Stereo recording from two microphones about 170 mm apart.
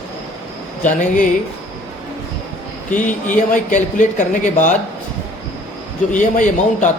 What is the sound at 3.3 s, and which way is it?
A woman's voice, 50° left (ahead or behind).